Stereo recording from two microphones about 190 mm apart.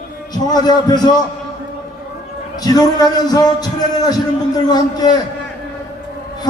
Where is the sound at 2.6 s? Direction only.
20° left (ahead or behind).